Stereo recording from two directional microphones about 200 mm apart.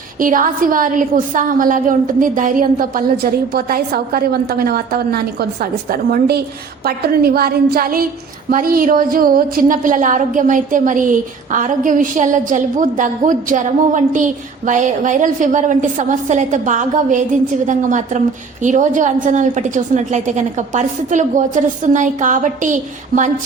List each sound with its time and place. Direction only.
0.2 s a woman's voice: 45° right (ahead or behind)